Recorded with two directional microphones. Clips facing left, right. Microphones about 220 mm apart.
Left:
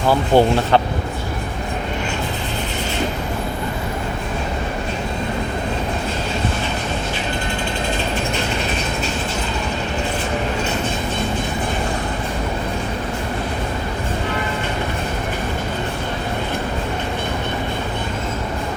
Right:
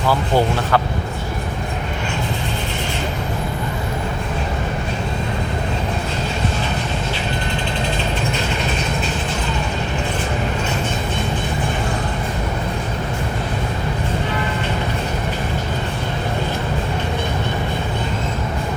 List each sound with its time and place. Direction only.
0.1 s speech: 25° left (ahead or behind)